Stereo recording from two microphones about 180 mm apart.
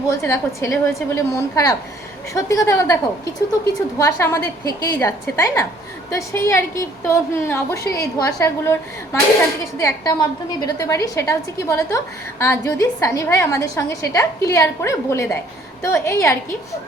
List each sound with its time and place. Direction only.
0.2 s a woman's voice: 15° left (ahead or behind)